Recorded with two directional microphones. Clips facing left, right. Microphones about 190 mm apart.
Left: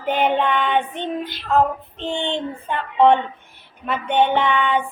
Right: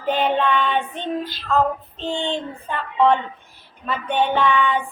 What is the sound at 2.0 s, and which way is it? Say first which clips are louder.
Female singing: left 1 dB; 20° left (ahead or behind).